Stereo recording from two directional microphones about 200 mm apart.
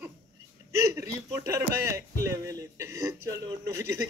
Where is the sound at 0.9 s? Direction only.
15° right (ahead or behind).